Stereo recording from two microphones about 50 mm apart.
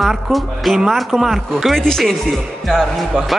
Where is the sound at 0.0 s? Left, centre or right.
Centre.